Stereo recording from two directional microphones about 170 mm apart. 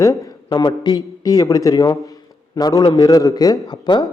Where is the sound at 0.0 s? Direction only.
20° left (ahead or behind).